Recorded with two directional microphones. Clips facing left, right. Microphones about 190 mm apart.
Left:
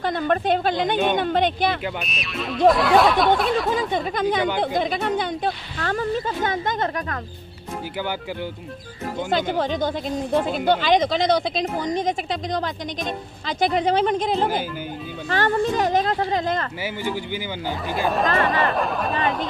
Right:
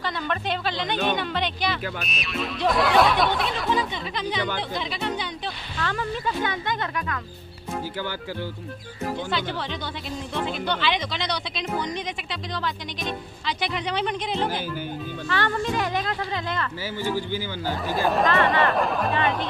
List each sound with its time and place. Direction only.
0.0 s a woman's voice: 50° left (ahead or behind)
2.0 s speech: centre (ahead or behind)
3.7 s a woman's voice: 50° left (ahead or behind)
9.3 s a woman's voice: 45° left (ahead or behind)
16.8 s a man's voice: 15° left (ahead or behind)
17.9 s speech: centre (ahead or behind)